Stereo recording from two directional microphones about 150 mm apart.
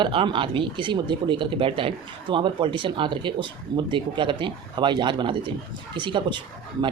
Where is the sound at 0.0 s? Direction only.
35° right (ahead or behind).